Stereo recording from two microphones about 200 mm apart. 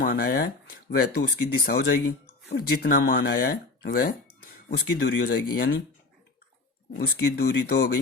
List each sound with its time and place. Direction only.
0.0 s speech: 50° left (ahead or behind)
7.0 s speech: 55° left (ahead or behind)